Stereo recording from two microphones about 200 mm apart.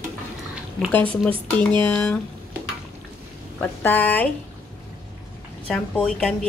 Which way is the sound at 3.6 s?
10° left (ahead or behind).